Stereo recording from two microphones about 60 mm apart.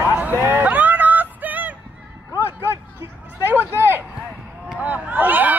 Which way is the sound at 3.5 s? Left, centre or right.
Right.